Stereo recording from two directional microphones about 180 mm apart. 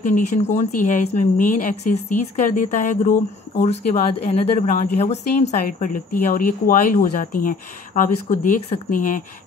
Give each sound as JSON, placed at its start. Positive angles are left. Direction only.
{"t": 0.0, "sound": "speech", "side_deg": 45}